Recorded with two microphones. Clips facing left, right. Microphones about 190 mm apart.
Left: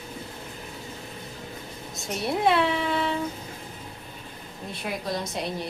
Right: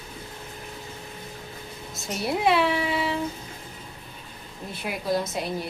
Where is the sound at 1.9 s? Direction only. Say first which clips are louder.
Even; centre (ahead or behind).